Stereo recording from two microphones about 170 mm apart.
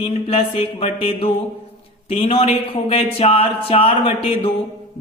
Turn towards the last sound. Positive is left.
turn(degrees=35)  # may be behind; listen again after turning